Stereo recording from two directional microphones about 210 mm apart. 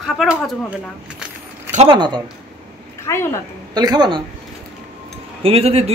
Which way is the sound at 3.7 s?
20° right (ahead or behind).